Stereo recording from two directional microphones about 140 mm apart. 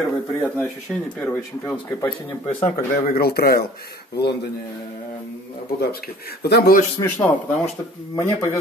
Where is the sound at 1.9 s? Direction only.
20° left (ahead or behind).